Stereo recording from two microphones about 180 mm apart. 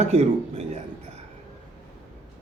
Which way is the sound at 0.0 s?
35° right (ahead or behind).